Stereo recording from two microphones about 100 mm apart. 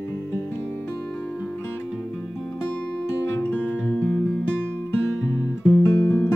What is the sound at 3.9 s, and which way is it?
Music, 15° left (ahead or behind).